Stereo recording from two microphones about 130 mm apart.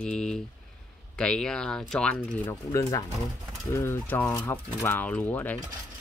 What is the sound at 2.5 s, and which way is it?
Speech, 30° left (ahead or behind).